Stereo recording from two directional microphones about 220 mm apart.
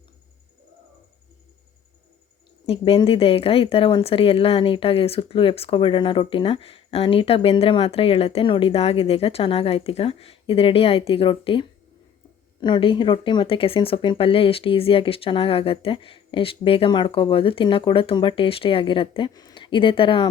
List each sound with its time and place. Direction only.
2.6 s speech: 25° left (ahead or behind)